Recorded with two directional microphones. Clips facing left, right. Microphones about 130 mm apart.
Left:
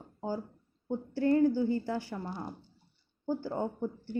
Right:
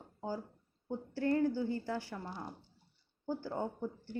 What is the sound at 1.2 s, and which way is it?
A woman's voice, 15° left (ahead or behind).